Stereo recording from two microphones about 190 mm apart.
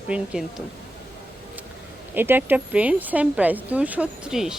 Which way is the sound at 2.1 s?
10° right (ahead or behind).